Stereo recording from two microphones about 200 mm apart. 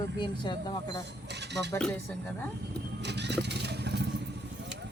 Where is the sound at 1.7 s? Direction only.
10° left (ahead or behind).